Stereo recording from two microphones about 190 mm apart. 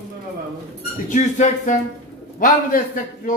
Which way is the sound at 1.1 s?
40° left (ahead or behind).